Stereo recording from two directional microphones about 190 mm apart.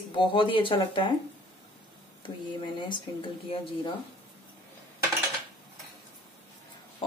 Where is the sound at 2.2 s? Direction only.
25° left (ahead or behind).